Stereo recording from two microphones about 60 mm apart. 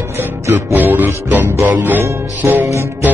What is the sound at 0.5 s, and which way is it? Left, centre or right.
Music, right.